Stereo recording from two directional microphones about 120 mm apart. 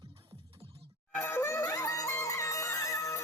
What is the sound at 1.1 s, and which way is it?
Music, 20° left (ahead or behind).